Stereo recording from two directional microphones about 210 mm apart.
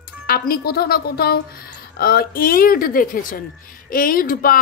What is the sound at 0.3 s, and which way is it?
A woman's voice, 45° left (ahead or behind).